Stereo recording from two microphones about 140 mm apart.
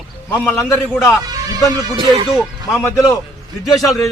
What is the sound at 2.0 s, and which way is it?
Speech, 35° right (ahead or behind).